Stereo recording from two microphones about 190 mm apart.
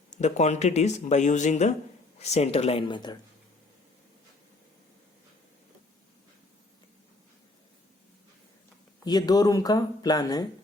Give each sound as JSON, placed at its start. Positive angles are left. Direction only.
{"t": 0.1, "sound": "speech", "side_deg": 35}
{"t": 9.0, "sound": "speech", "side_deg": 20}